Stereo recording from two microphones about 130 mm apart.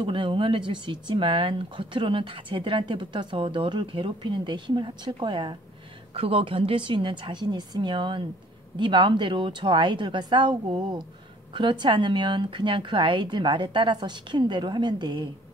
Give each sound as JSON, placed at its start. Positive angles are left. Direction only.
{"t": 0.0, "sound": "speech", "side_deg": -40}